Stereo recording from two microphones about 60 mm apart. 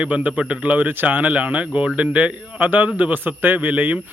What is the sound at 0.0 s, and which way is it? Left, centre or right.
A man's voice, right.